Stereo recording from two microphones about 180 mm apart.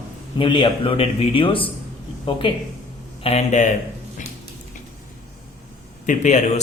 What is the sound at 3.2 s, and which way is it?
Speech, 40° left (ahead or behind).